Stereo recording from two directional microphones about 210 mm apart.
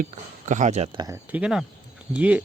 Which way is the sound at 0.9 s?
15° right (ahead or behind).